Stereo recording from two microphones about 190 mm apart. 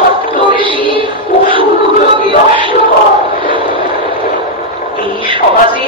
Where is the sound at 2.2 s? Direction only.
25° right (ahead or behind).